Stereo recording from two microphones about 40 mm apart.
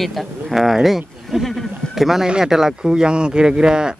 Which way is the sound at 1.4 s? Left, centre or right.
Centre.